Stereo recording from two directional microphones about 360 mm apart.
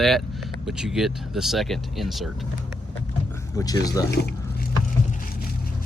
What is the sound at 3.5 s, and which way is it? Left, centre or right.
Speech, centre.